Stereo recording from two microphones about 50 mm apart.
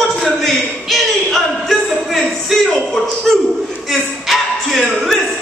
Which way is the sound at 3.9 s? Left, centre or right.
Centre.